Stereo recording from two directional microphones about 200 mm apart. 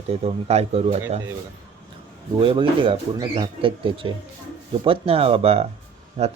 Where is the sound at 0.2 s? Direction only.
30° right (ahead or behind).